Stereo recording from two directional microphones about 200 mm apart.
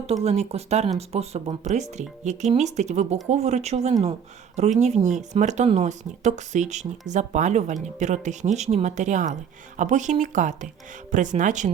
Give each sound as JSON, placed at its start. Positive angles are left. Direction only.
{"t": 0.1, "sound": "speech", "side_deg": -30}